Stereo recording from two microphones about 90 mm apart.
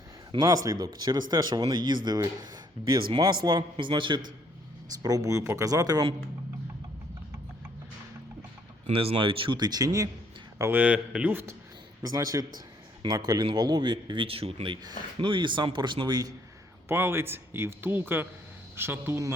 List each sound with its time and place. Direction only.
0.4 s speech: 40° right (ahead or behind); by 4.2 s 65° right (ahead or behind)
5.0 s speech: 40° right (ahead or behind)
8.9 s speech: 90° right
9.6 s speech: 50° right (ahead or behind)
10.8 s speech: 15° right (ahead or behind)
12.0 s speech: 40° right (ahead or behind); by 14.8 s 80° right
14.8 s speech: 65° right (ahead or behind)
16.9 s speech: 25° right (ahead or behind)